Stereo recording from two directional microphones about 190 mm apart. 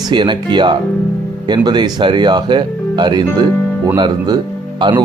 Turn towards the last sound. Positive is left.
turn(degrees=-25)  # may be behind; listen again after turning